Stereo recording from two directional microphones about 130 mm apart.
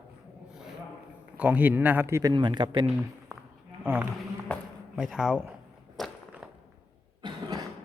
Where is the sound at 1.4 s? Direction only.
15° right (ahead or behind).